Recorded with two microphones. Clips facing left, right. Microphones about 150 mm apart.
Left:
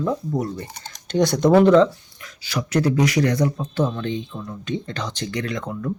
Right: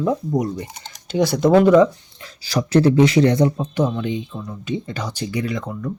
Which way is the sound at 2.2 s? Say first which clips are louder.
Right 5 dB; 35° right (ahead or behind).